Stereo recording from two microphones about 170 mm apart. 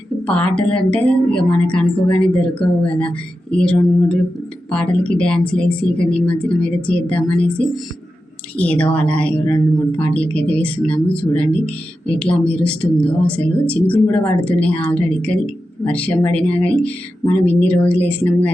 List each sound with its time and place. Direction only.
0.3 s speech: 5° left (ahead or behind)